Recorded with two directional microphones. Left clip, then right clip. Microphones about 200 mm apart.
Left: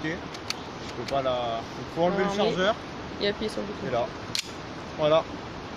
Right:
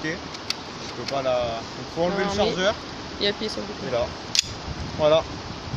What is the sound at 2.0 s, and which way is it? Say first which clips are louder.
Speech: right 2 dB; 10° right (ahead or behind).